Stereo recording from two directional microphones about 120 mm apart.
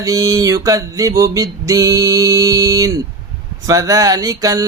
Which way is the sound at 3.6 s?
30° right (ahead or behind).